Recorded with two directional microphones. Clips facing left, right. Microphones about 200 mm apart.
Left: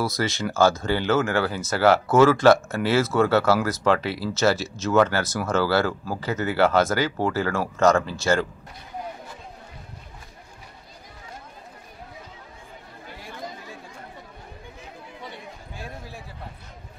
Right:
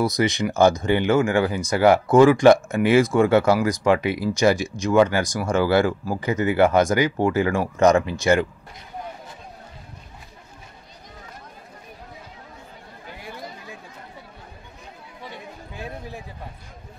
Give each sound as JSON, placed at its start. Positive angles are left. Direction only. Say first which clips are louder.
{"t": 0.0, "sound": "speech", "louder": "right 4 dB", "side_deg": -15}